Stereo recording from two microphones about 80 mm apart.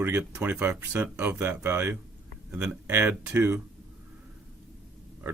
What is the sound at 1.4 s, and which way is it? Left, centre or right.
Speech, right.